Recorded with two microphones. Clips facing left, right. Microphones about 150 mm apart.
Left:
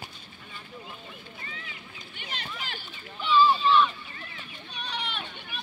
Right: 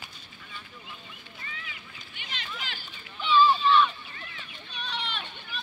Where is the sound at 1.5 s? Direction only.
35° left (ahead or behind).